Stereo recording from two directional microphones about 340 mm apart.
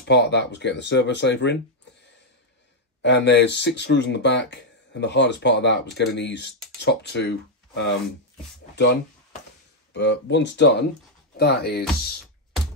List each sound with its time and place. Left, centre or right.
0.0 s speech: left
3.0 s speech: left